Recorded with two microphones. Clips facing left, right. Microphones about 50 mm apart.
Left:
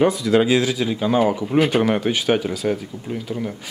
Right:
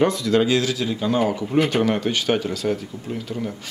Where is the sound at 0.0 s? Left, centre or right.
Centre.